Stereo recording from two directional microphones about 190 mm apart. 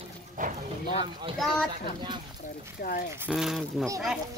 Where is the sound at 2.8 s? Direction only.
45° left (ahead or behind).